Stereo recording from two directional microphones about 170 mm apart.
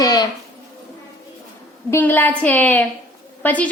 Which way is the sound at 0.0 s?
20° left (ahead or behind).